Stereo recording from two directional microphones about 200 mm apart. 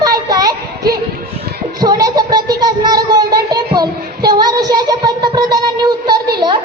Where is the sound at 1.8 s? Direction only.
20° right (ahead or behind).